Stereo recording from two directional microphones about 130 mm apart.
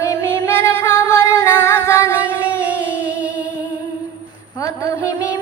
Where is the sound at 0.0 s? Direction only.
25° left (ahead or behind).